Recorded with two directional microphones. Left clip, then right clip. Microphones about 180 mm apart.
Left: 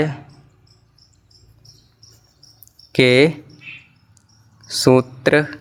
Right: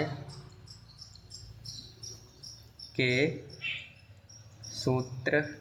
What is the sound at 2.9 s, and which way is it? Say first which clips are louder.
Speech: left 15 dB; 60° left (ahead or behind).